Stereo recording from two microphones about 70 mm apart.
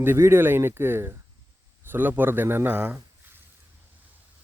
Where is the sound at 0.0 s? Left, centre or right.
Right.